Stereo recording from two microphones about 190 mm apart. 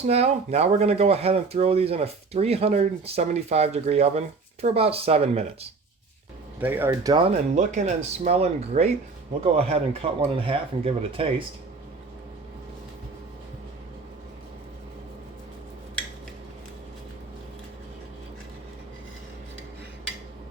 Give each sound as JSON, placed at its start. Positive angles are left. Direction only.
{"t": 0.0, "sound": "speech", "side_deg": -35}
{"t": 6.6, "sound": "speech", "side_deg": -10}
{"t": 7.1, "sound": "speech", "side_deg": -30}